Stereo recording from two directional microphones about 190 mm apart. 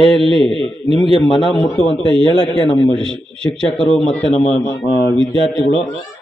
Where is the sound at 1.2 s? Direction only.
25° left (ahead or behind).